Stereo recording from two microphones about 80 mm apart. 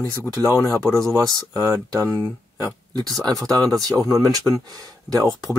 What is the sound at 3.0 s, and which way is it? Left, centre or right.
Speech, right.